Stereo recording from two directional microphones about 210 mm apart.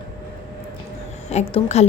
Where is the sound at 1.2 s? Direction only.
30° left (ahead or behind).